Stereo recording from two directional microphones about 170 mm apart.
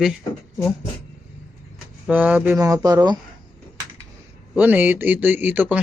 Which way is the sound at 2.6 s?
20° right (ahead or behind).